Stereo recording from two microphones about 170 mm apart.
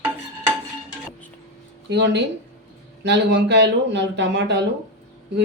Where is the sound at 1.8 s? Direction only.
90° right.